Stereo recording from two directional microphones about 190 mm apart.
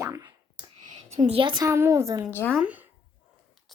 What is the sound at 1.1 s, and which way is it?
Speech, 30° right (ahead or behind).